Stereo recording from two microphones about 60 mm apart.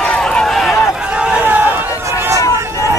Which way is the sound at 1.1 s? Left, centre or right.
Centre.